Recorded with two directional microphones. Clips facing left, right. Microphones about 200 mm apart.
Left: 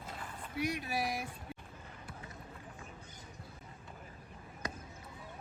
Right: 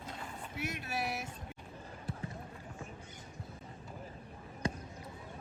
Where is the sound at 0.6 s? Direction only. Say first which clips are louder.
Left 3 dB; 15° left (ahead or behind).